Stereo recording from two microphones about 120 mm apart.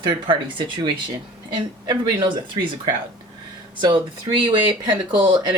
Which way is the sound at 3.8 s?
40° right (ahead or behind).